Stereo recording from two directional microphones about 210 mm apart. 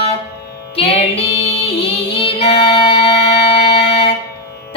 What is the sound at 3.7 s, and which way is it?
Fire alarm, 50° left (ahead or behind).